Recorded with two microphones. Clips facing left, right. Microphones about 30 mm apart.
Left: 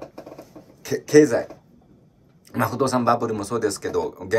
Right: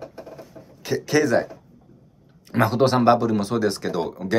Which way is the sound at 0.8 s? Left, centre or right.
Right.